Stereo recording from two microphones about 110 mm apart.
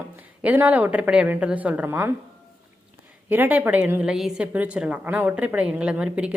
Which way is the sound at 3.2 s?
15° right (ahead or behind).